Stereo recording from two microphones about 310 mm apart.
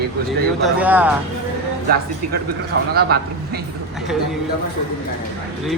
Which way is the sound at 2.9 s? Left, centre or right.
Right.